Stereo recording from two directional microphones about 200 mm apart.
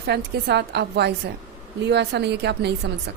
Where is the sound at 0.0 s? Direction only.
55° right (ahead or behind).